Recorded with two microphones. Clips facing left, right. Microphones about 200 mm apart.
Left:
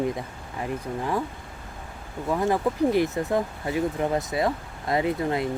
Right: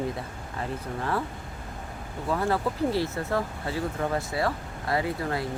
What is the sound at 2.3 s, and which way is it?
Speech, 15° left (ahead or behind).